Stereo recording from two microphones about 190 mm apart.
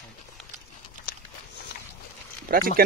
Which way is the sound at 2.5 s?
45° right (ahead or behind).